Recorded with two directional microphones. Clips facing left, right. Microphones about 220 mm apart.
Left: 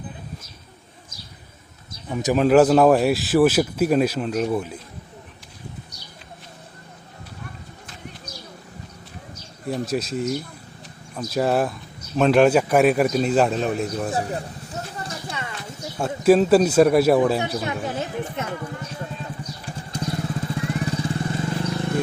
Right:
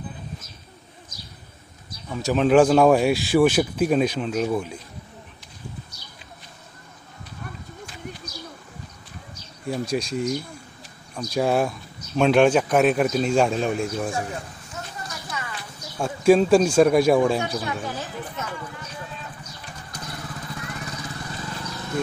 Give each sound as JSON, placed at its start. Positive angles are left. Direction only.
{"t": 2.0, "sound": "speech", "side_deg": 15}
{"t": 2.3, "sound": "speech", "side_deg": 5}
{"t": 9.6, "sound": "speech", "side_deg": 0}
{"t": 14.1, "sound": "a sound", "side_deg": 35}
{"t": 16.0, "sound": "speech", "side_deg": 5}
{"t": 17.6, "sound": "speech", "side_deg": 20}
{"t": 19.9, "sound": "vehicle", "side_deg": 25}